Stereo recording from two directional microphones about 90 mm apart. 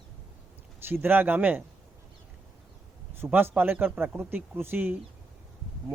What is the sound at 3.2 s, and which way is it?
Speech, 20° right (ahead or behind).